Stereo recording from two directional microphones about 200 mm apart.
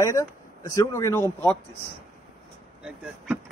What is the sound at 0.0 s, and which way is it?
Speech, 15° left (ahead or behind).